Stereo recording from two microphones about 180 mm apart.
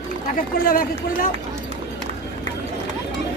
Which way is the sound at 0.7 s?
50° left (ahead or behind).